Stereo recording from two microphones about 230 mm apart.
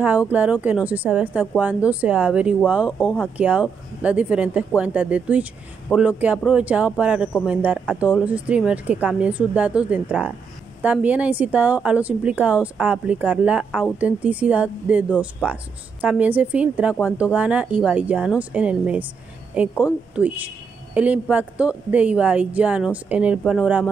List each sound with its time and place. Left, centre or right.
0.3 s a woman's voice: centre